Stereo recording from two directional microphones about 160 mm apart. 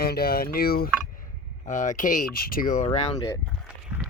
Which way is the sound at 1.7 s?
50° left (ahead or behind).